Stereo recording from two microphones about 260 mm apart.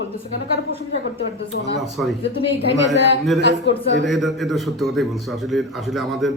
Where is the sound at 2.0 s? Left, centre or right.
Centre.